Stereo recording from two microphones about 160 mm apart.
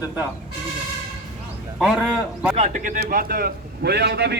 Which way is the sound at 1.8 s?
5° right (ahead or behind).